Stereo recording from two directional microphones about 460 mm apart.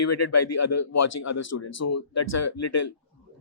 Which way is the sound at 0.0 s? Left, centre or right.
Left.